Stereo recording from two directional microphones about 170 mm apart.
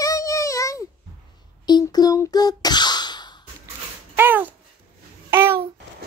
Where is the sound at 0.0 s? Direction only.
20° left (ahead or behind).